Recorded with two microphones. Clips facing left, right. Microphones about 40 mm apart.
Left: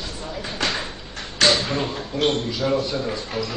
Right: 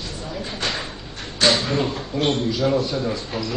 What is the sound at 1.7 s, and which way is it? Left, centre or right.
A man's voice, centre.